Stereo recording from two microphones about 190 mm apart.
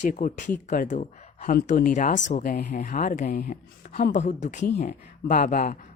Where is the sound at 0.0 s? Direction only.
45° left (ahead or behind).